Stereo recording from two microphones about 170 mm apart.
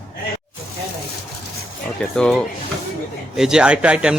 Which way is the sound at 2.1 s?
5° left (ahead or behind).